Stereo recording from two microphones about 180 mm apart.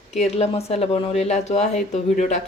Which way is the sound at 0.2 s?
35° left (ahead or behind).